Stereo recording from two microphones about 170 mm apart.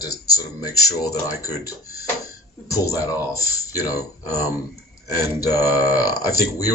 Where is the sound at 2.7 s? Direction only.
20° left (ahead or behind).